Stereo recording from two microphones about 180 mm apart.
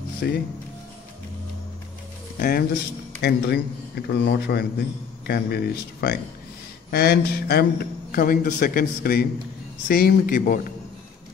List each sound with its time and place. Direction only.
0.2 s a man's voice: 60° left (ahead or behind)
2.3 s speech: 45° left (ahead or behind)
3.2 s a man's voice: 65° left (ahead or behind)